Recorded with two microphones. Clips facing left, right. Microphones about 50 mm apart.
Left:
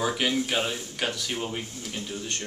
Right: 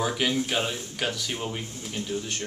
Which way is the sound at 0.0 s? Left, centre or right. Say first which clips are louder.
Even; centre.